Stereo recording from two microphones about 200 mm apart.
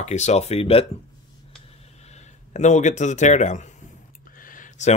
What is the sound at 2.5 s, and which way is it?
Speech, 35° left (ahead or behind).